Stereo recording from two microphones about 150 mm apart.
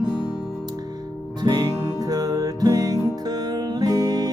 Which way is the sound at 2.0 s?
25° right (ahead or behind).